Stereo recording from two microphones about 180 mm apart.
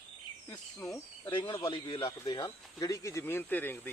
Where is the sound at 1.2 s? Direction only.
25° left (ahead or behind).